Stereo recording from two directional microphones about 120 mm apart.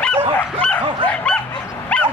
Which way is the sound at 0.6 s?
10° left (ahead or behind).